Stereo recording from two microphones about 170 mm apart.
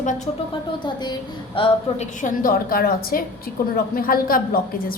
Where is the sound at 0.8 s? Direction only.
25° left (ahead or behind).